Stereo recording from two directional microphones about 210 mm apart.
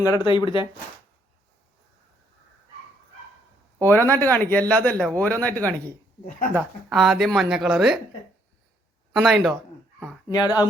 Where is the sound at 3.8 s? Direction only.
10° left (ahead or behind).